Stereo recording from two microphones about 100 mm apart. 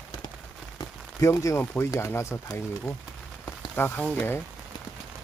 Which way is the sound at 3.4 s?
20° left (ahead or behind).